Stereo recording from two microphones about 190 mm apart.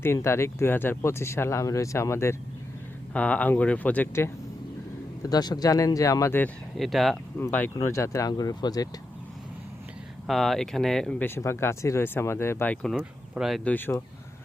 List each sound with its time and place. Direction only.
0.0 s speech: 15° left (ahead or behind)
6.7 s speech: centre (ahead or behind); by 8.9 s 20° left (ahead or behind)
10.2 s speech: centre (ahead or behind)
13.7 s speech: 10° left (ahead or behind)